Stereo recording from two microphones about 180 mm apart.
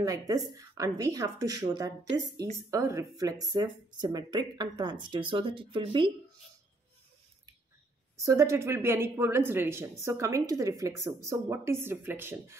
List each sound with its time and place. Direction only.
0.0 s speech: 20° right (ahead or behind)
8.2 s speech: 15° right (ahead or behind)